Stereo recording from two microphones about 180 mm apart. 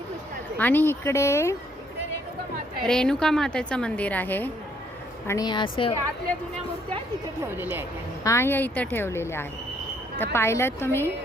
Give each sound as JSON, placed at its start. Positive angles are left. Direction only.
{"t": 0.6, "sound": "a woman's voice", "side_deg": 10}
{"t": 2.8, "sound": "a woman's voice", "side_deg": 5}
{"t": 5.3, "sound": "a woman's voice", "side_deg": 20}
{"t": 7.5, "sound": "a woman's voice", "side_deg": -10}
{"t": 8.2, "sound": "a woman's voice", "side_deg": 15}